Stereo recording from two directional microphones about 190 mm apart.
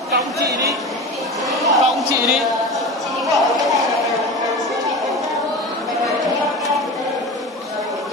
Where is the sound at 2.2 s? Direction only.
Centre (ahead or behind).